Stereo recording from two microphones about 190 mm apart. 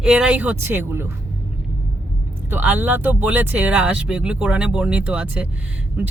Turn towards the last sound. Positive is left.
turn(degrees=-5)  # may be behind; listen again after turning